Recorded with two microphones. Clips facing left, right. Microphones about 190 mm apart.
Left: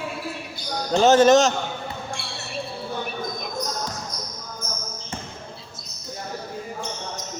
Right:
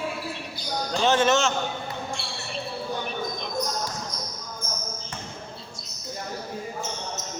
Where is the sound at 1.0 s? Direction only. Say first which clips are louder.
Left 7 dB; 40° left (ahead or behind).